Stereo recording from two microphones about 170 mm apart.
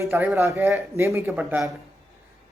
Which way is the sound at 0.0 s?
15° right (ahead or behind).